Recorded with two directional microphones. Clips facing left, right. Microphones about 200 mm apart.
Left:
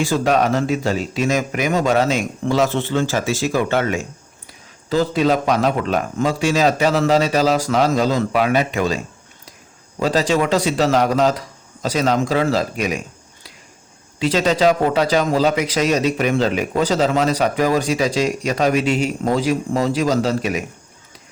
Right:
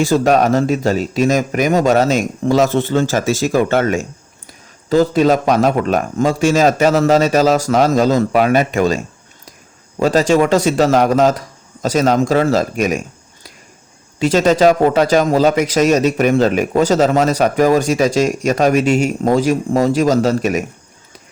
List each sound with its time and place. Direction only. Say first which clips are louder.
0.0 s a man's voice: right 4 dB; 45° right (ahead or behind)
10.0 s a man's voice: right 5 dB; 45° right (ahead or behind)
14.2 s a man's voice: right 5 dB; 45° right (ahead or behind)